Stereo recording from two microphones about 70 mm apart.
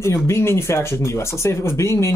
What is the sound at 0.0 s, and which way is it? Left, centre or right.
Speech, left.